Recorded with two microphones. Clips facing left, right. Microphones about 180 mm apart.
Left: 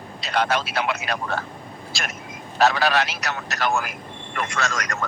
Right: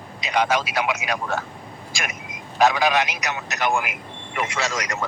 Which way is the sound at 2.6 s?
15° right (ahead or behind).